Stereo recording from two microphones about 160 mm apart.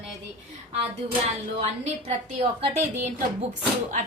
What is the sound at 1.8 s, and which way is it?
Speech, 45° right (ahead or behind).